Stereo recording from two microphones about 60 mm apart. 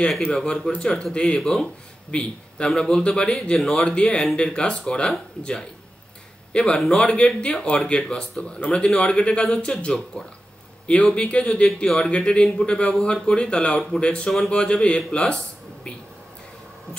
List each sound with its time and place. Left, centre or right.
0.3 s speech: centre